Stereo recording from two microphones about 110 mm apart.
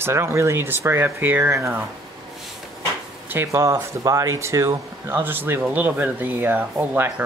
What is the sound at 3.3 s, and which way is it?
Speech, 25° right (ahead or behind).